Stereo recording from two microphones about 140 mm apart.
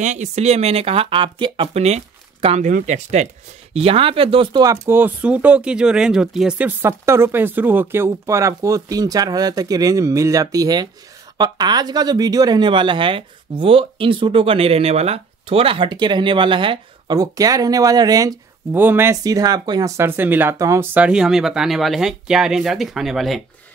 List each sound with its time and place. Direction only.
0.0 s speech: 55° right (ahead or behind); by 1.8 s 35° right (ahead or behind)
2.4 s speech: 50° right (ahead or behind)
3.7 s speech: 45° right (ahead or behind)
4.8 s speech: 15° right (ahead or behind)
6.8 s speech: 20° right (ahead or behind)
18.7 s speech: 15° right (ahead or behind)
20.0 s speech: 15° right (ahead or behind)